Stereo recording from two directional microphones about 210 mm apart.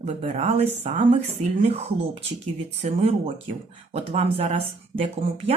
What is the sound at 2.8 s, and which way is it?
Speech, 30° right (ahead or behind).